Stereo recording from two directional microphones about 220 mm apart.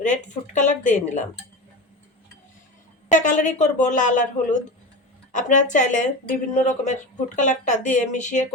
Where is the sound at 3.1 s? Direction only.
35° left (ahead or behind).